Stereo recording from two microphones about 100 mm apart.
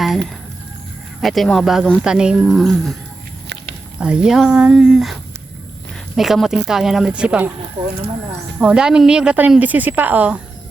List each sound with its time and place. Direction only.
1.2 s speech: centre (ahead or behind)
3.9 s speech: 10° right (ahead or behind)
6.1 s speech: 5° right (ahead or behind)
8.5 s speech: 10° right (ahead or behind)